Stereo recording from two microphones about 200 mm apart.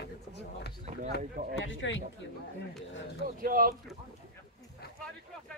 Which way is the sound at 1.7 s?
70° left (ahead or behind).